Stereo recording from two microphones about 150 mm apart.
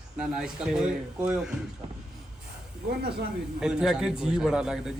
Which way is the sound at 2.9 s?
90° right.